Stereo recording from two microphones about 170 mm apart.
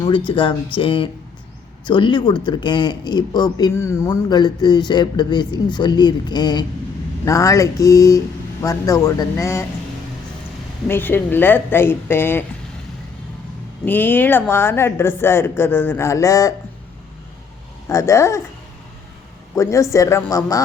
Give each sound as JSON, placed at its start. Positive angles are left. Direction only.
{"t": 0.0, "sound": "a woman's voice", "side_deg": 30}
{"t": 10.8, "sound": "a woman's voice", "side_deg": 15}
{"t": 13.8, "sound": "a woman's voice", "side_deg": 10}
{"t": 17.8, "sound": "a woman's voice", "side_deg": 15}
{"t": 19.5, "sound": "a woman's voice", "side_deg": 15}